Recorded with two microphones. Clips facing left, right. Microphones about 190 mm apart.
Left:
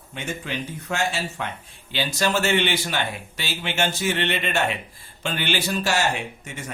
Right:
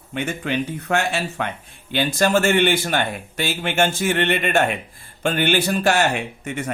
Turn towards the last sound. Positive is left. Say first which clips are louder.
# right 7 dB
turn(degrees=-60)  # may be behind; listen again after turning